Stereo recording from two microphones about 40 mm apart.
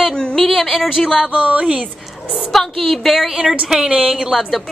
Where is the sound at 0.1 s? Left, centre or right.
Left.